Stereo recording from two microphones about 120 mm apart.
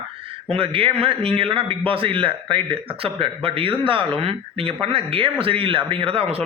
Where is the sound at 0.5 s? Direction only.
50° right (ahead or behind).